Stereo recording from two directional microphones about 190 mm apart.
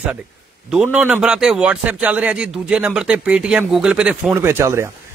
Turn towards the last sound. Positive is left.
turn(degrees=-15)  # may be behind; listen again after turning